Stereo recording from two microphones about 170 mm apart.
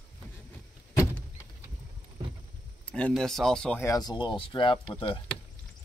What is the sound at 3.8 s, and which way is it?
Speech, 20° left (ahead or behind).